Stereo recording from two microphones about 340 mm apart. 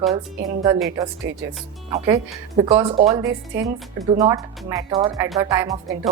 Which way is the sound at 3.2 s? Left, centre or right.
Right.